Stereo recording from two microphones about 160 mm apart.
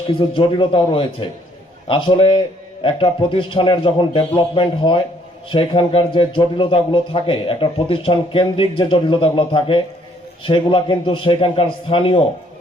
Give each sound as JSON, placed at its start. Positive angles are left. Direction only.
{"t": 0.3, "sound": "a man's voice", "side_deg": 30}